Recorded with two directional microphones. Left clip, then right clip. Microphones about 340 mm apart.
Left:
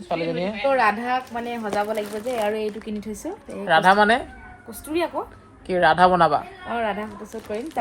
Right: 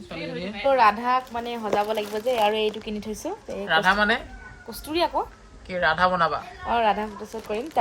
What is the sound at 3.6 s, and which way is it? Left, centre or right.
Speech, centre.